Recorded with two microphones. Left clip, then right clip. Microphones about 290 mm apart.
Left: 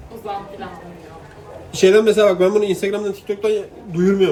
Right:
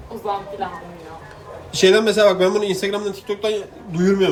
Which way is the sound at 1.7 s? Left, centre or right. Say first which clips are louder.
Left 2 dB; centre.